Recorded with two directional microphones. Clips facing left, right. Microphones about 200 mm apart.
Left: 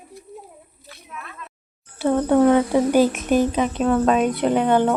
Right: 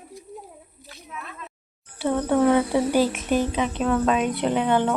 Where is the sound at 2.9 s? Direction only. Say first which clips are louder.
Left 5 dB; 45° left (ahead or behind).